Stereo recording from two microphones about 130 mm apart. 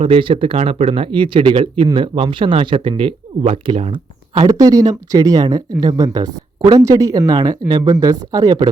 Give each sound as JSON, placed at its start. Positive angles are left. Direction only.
{"t": 0.0, "sound": "speech", "side_deg": -45}
{"t": 0.5, "sound": "speech", "side_deg": -55}
{"t": 4.4, "sound": "speech", "side_deg": -25}